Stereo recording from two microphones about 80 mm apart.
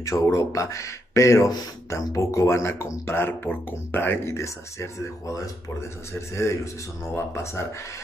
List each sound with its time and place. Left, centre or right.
0.0 s speech: left